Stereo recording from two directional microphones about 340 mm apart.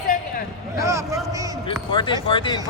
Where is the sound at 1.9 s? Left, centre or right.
Centre.